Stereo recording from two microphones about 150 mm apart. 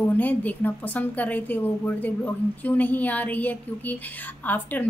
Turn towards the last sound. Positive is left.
turn(degrees=10)  # may be behind; listen again after turning